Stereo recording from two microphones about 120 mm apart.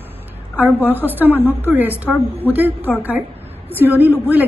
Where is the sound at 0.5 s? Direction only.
15° right (ahead or behind).